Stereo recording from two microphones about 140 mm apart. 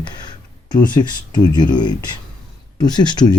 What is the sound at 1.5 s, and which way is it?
Speech, 30° left (ahead or behind).